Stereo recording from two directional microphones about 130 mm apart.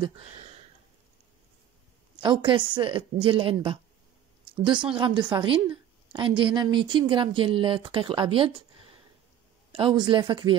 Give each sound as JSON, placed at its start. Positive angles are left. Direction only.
{"t": 0.0, "sound": "a sound", "side_deg": -50}
{"t": 2.2, "sound": "speech", "side_deg": -40}
{"t": 4.6, "sound": "speech", "side_deg": -40}
{"t": 9.7, "sound": "speech", "side_deg": -40}